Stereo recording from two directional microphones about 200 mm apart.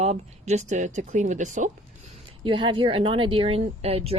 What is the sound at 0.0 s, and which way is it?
Speech, 35° right (ahead or behind).